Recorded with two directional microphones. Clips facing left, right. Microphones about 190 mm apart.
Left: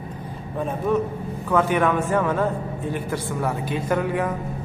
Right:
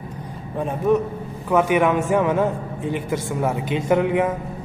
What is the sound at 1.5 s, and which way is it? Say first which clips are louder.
A man's voice: right 2 dB; 15° right (ahead or behind).